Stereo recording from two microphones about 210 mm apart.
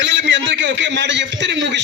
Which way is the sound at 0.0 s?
55° right (ahead or behind).